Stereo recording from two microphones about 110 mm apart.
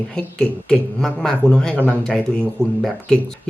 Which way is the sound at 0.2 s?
10° left (ahead or behind).